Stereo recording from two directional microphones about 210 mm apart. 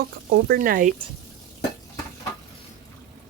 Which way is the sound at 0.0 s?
45° right (ahead or behind).